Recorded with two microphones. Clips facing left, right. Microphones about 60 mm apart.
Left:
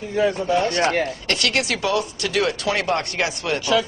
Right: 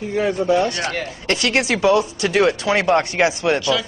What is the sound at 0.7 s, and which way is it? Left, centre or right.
Speech, left.